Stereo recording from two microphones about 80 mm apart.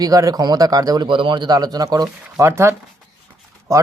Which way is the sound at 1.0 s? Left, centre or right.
Right.